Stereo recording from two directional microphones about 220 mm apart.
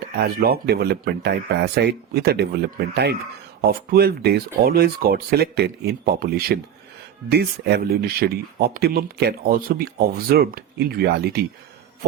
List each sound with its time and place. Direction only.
0.2 s speech: 45° right (ahead or behind)